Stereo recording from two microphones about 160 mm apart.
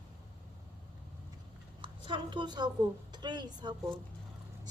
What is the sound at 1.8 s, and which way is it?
A woman's voice, 30° right (ahead or behind).